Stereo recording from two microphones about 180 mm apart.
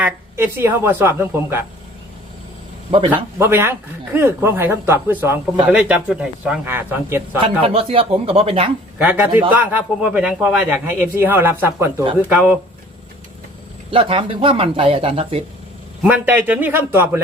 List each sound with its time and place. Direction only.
0.0 s a man's voice: 10° right (ahead or behind)
3.3 s a man's voice: 15° right (ahead or behind)
7.6 s speech: 30° right (ahead or behind)
9.0 s a man's voice: 10° right (ahead or behind)
13.9 s speech: 30° right (ahead or behind)
16.0 s a man's voice: 10° right (ahead or behind)